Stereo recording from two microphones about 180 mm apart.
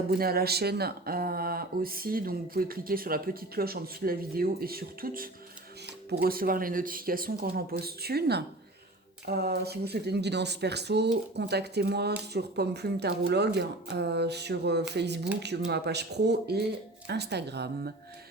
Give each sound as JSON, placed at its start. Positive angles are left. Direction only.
{"t": 0.1, "sound": "speech", "side_deg": -60}